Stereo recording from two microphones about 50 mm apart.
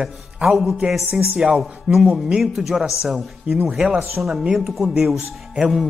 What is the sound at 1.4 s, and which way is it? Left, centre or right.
A man's voice, centre.